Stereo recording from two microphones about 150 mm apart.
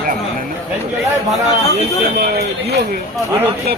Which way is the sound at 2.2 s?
90° right.